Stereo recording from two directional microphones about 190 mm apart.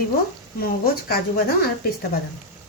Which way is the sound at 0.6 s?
50° left (ahead or behind).